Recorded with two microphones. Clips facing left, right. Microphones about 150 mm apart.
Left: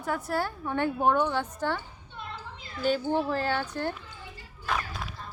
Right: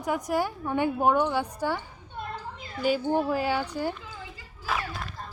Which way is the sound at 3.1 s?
10° right (ahead or behind).